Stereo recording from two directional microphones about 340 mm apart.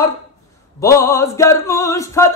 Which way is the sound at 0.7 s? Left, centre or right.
Centre.